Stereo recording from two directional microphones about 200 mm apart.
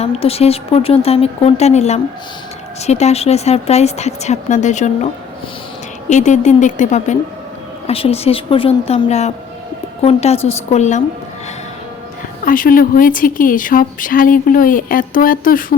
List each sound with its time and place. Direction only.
0.0 s speech: 30° left (ahead or behind)
6.1 s speech: 35° left (ahead or behind)
12.5 s speech: 45° left (ahead or behind)